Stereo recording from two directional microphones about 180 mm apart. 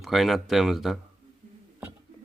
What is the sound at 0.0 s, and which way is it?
Speech, centre (ahead or behind).